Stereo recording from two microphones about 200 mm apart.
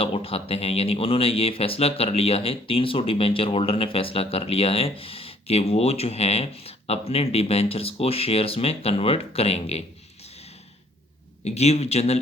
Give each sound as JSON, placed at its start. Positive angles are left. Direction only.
{"t": 0.0, "sound": "speech", "side_deg": 30}
{"t": 11.4, "sound": "speech", "side_deg": 30}